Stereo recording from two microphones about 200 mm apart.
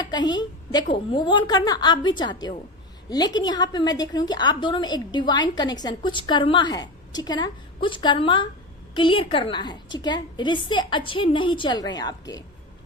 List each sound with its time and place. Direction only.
0.0 s a woman's voice: 20° left (ahead or behind)